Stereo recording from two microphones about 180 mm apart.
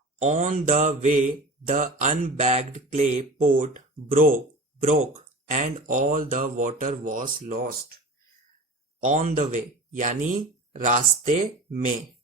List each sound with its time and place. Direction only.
0.2 s mantra: 45° right (ahead or behind)
9.0 s mantra: 45° right (ahead or behind)